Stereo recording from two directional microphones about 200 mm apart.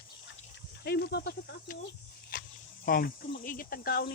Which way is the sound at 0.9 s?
55° left (ahead or behind).